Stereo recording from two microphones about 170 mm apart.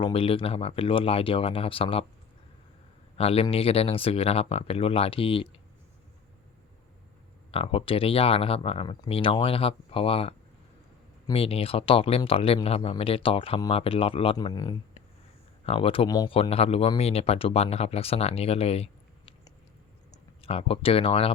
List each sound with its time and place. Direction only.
0.0 s speech: 35° left (ahead or behind)
3.2 s a man's voice: 35° left (ahead or behind)
7.5 s speech: 35° left (ahead or behind)
16.0 s speech: 25° left (ahead or behind)
20.4 s speech: 35° left (ahead or behind)